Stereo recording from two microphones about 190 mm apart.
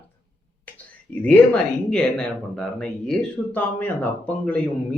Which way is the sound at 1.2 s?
5° left (ahead or behind).